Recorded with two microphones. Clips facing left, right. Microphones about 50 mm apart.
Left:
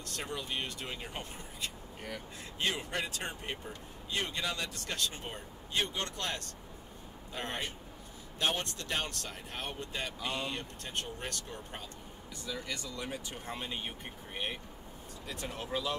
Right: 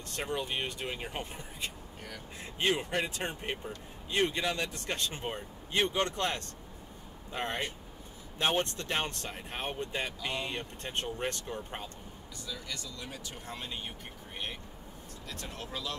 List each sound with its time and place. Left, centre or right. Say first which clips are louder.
0.1 s speech: right 4 dB; right
12.4 s speech: left 2 dB; left